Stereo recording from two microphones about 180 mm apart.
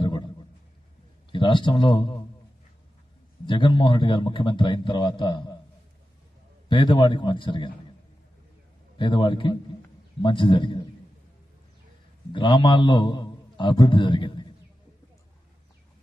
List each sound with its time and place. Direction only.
1.3 s a man's voice: 25° left (ahead or behind)
3.4 s a man's voice: 25° left (ahead or behind)
6.7 s a man's voice: 25° left (ahead or behind)
8.9 s a man's voice: 25° left (ahead or behind)
12.3 s a man's voice: 25° left (ahead or behind)